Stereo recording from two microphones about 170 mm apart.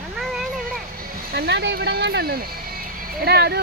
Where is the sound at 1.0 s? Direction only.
70° right (ahead or behind).